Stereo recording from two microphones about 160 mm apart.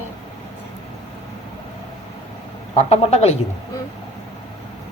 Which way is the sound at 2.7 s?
45° left (ahead or behind).